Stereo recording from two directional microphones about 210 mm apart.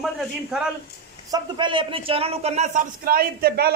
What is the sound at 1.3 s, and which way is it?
A man's voice, 25° right (ahead or behind).